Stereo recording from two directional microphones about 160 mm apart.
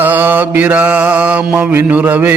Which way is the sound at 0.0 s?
10° right (ahead or behind).